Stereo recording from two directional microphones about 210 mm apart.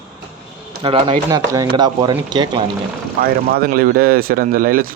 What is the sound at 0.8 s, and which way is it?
Speech, 25° right (ahead or behind).